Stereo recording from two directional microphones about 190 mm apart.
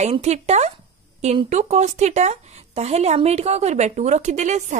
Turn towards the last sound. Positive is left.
turn(degrees=-40)  # may be behind; listen again after turning